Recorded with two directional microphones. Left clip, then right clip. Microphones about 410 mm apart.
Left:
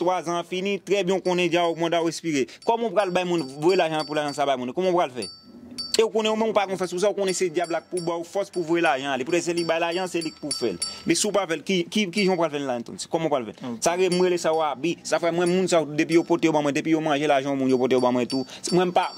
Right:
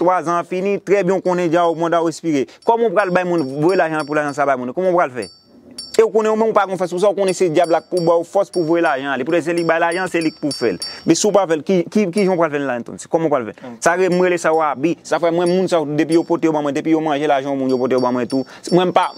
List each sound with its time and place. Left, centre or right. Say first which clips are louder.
0.0 s speech: right 8 dB; right
18.7 s speech: right 7 dB; right